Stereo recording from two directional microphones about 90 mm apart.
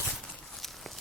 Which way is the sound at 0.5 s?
Centre (ahead or behind).